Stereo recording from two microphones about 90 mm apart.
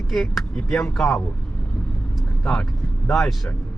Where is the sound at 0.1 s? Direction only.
5° left (ahead or behind).